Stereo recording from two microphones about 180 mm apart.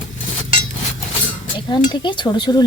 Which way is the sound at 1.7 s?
25° left (ahead or behind).